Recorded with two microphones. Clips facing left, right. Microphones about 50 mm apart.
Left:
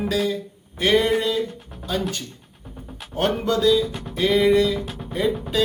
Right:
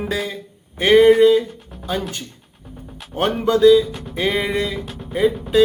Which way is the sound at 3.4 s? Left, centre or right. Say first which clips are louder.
Right 8 dB; right.